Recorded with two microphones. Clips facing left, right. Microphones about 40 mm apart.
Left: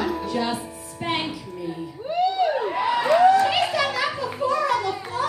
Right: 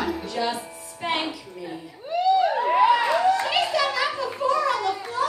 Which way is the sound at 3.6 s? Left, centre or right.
Left.